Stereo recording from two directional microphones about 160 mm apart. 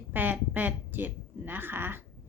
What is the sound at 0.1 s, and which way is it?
A woman's voice, 10° right (ahead or behind).